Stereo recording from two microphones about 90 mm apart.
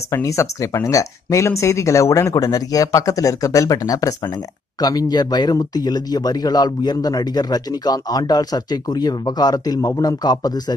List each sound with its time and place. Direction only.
0.1 s speech: 35° left (ahead or behind)